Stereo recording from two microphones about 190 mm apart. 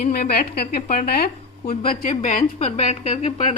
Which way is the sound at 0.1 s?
55° left (ahead or behind).